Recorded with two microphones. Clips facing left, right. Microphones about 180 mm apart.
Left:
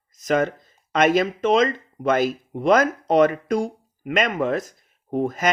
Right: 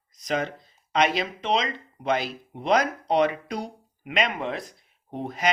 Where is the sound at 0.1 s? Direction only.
45° left (ahead or behind).